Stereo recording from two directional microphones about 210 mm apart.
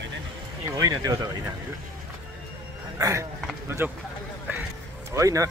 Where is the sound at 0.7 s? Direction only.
20° right (ahead or behind).